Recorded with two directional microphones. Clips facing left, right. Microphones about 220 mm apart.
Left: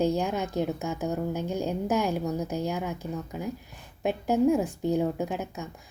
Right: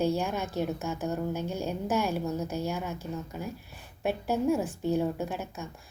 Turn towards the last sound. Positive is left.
turn(degrees=15)  # may be behind; listen again after turning